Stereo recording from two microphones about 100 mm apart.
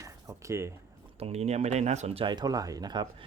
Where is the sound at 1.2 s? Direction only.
90° right.